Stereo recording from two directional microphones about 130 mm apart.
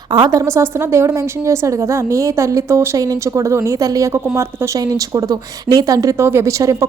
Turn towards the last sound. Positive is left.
turn(degrees=-25)  # may be behind; listen again after turning